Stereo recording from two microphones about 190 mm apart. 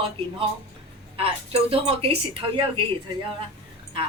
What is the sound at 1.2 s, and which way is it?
Speech, 30° right (ahead or behind).